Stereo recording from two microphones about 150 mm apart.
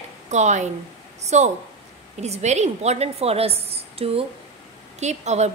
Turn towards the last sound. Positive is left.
turn(degrees=-50)  # may be behind; listen again after turning